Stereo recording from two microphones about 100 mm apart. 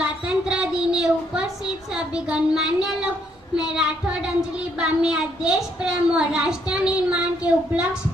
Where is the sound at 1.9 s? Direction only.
5° right (ahead or behind).